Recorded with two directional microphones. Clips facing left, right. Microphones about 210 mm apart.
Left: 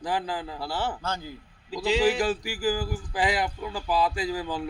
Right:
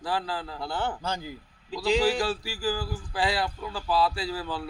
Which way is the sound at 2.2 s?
15° left (ahead or behind).